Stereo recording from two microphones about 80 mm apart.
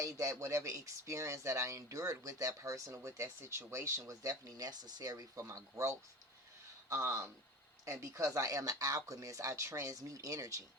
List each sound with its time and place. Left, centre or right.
0.0 s speech: right
5.1 s speech: right